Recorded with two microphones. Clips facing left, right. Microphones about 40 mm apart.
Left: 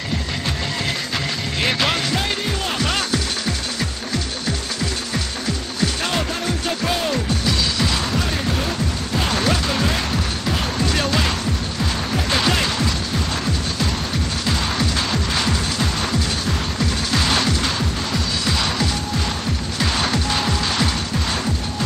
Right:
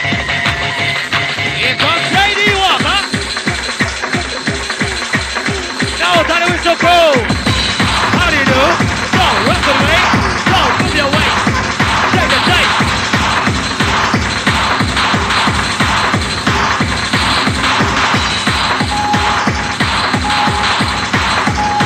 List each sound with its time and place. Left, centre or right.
2.1 s music: right
6.0 s music: right
8.1 s music: right
9.3 s music: right
9.7 s music: right
10.0 s music: right
10.8 s music: right
11.4 s music: right
12.3 s music: right
17.1 s music: right
17.6 s music: right
19.8 s music: right
21.1 s music: right